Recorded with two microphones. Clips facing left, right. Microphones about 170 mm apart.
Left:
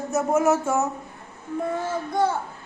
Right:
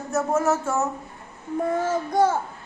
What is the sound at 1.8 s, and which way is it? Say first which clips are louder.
Speech: right 3 dB; 40° right (ahead or behind).